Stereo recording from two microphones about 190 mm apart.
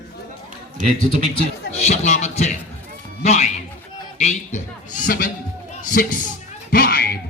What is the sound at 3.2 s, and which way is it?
Music, 35° left (ahead or behind).